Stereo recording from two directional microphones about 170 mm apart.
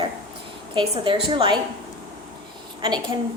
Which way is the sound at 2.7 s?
25° right (ahead or behind).